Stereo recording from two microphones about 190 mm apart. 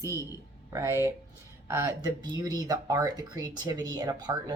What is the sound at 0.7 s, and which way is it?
Speech, 15° right (ahead or behind).